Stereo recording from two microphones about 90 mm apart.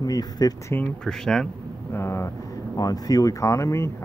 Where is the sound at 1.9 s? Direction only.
30° left (ahead or behind).